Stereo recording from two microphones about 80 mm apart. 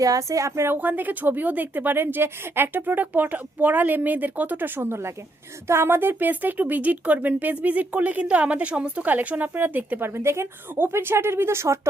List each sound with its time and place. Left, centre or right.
0.0 s a woman's voice: right
0.8 s speech: right